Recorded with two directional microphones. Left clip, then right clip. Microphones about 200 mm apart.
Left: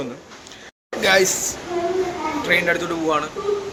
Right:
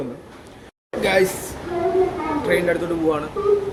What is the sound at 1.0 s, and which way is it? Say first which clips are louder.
Speech: left 2 dB; centre (ahead or behind).